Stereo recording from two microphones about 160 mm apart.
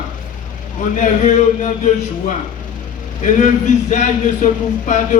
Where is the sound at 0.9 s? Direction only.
50° left (ahead or behind).